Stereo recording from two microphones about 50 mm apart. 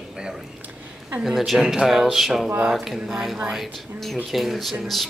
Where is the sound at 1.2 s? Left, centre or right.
Centre.